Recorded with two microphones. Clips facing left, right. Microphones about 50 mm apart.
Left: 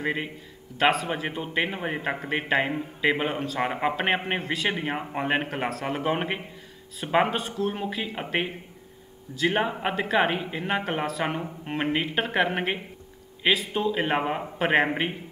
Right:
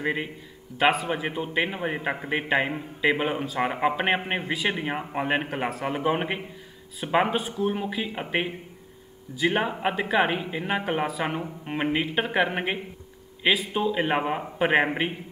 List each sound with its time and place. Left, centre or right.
0.0 s a man's voice: centre
4.6 s a man's voice: centre
7.3 s speech: centre
7.7 s a man's voice: centre
9.5 s a man's voice: centre